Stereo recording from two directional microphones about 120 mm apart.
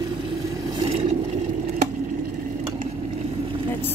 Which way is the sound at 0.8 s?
75° right (ahead or behind).